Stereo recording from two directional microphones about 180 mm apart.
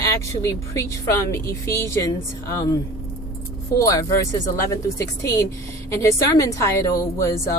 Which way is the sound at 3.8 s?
20° left (ahead or behind).